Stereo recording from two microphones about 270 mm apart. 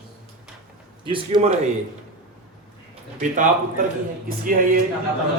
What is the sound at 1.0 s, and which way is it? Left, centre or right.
Speech, centre.